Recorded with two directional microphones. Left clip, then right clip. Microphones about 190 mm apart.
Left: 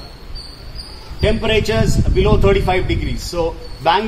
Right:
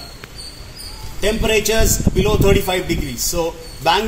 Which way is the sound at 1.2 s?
Centre (ahead or behind).